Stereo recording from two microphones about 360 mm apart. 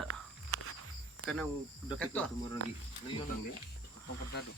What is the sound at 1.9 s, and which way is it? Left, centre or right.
Speech, centre.